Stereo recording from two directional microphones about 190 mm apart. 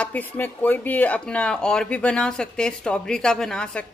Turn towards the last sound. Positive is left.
turn(degrees=5)  # may be behind; listen again after turning